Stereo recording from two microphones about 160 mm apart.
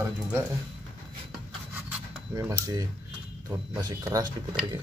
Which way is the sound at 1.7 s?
15° right (ahead or behind).